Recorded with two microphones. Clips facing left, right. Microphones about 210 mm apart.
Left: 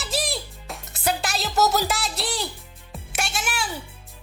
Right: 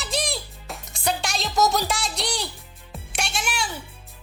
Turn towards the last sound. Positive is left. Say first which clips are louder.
# even
turn(degrees=0)  # may be behind; listen again after turning